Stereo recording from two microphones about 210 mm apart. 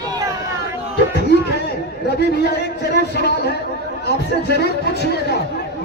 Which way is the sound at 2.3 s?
50° left (ahead or behind).